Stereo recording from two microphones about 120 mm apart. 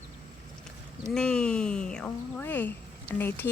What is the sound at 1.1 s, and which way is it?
Speech, 5° left (ahead or behind).